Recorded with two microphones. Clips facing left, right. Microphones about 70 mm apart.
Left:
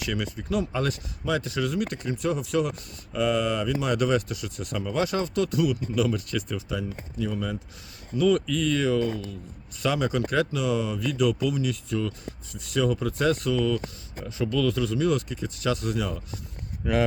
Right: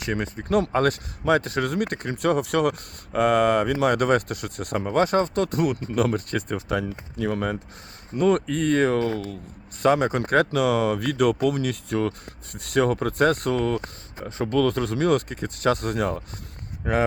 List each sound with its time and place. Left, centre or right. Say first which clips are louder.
0.0 s speech: right 3 dB; right
0.4 s speech: right 7 dB; right
9.8 s speech: right 5 dB; right